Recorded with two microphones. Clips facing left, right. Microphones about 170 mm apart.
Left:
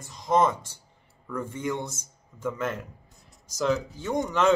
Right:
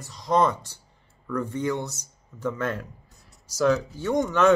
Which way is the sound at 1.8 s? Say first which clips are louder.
Right 1 dB; 50° left (ahead or behind).